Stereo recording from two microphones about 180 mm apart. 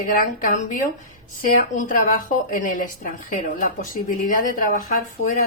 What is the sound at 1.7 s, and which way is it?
A woman's voice, 45° left (ahead or behind).